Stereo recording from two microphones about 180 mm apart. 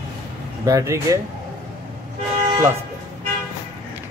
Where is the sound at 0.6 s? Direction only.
15° right (ahead or behind).